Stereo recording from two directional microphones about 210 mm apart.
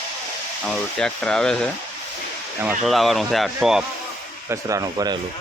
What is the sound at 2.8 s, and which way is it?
Speech, centre (ahead or behind).